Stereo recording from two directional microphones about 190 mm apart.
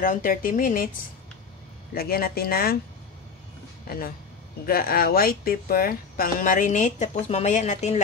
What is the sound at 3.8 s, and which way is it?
Speech, 50° left (ahead or behind).